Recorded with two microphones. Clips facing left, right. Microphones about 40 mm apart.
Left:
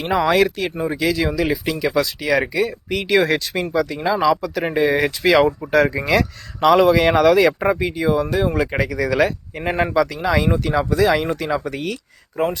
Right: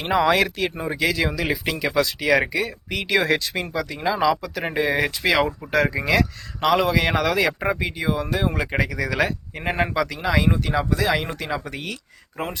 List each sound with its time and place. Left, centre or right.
0.0 s speech: centre; by 1.3 s right
1.3 s speech: centre
2.6 s speech: centre
7.8 s speech: centre
10.2 s speech: centre